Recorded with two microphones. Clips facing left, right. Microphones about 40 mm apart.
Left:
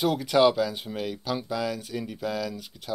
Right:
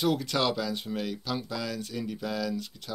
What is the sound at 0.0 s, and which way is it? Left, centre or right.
Speech, centre.